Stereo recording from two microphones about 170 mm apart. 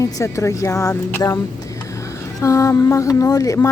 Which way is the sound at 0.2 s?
20° left (ahead or behind).